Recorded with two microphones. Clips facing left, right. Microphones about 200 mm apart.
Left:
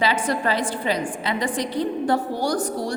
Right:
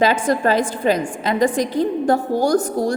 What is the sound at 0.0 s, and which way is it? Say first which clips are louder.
A woman's voice: right 5 dB; 45° right (ahead or behind).